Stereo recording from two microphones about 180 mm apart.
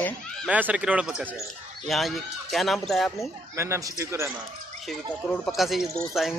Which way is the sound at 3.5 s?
15° right (ahead or behind).